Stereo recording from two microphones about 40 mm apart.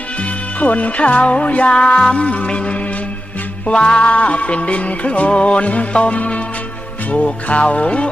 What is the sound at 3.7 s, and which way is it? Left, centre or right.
Music, left.